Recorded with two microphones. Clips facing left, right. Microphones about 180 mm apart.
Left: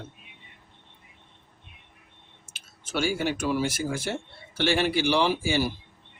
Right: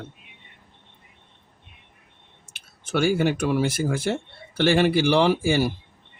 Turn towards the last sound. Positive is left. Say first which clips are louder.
# right 5 dB
turn(degrees=-55)  # may be behind; listen again after turning